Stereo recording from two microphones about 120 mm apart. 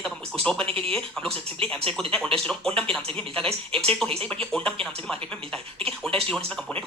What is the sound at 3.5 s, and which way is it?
Speech, 50° right (ahead or behind).